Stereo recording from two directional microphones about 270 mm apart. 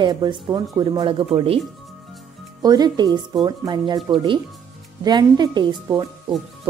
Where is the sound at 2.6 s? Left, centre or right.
Centre.